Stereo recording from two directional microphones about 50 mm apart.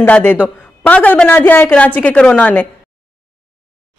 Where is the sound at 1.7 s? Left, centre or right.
Left.